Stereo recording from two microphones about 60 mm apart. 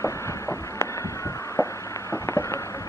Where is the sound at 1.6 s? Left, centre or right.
Left.